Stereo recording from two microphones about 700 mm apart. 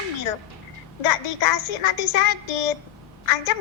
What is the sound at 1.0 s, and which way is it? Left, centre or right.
Speech, left.